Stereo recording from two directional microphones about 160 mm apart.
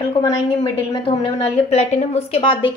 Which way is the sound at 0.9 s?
40° left (ahead or behind).